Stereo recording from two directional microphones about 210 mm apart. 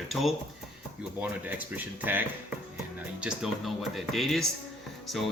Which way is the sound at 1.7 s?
10° right (ahead or behind).